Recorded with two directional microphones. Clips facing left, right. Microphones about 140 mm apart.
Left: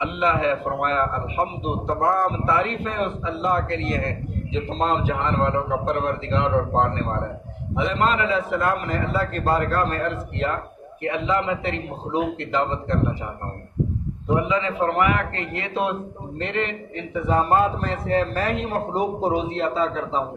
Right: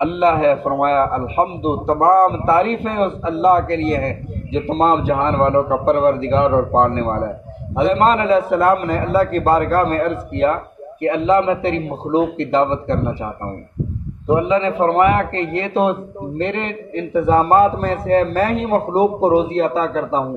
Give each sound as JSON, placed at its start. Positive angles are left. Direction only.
{"t": 0.0, "sound": "a man's voice", "side_deg": -35}
{"t": 14.5, "sound": "a man's voice", "side_deg": -35}